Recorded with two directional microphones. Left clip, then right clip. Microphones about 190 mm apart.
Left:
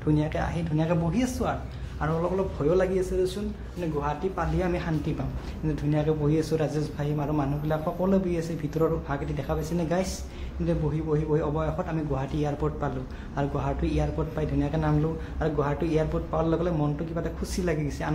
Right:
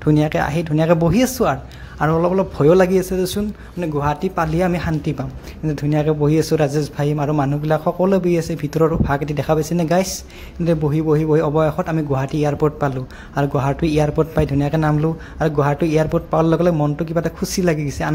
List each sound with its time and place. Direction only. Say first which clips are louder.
0.0 s a man's voice: right 10 dB; 45° right (ahead or behind)